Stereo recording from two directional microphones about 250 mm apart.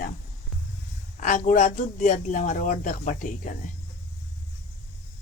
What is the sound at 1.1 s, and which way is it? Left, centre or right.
Speech, left.